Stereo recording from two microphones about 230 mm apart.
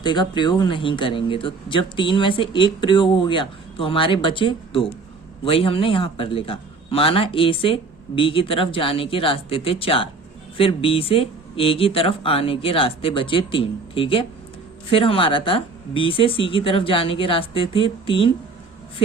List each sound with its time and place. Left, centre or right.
0.0 s speech: centre